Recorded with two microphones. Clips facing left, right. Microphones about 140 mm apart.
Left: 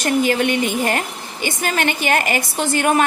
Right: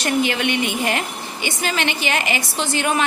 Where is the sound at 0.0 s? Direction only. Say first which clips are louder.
Left 3 dB; 45° left (ahead or behind).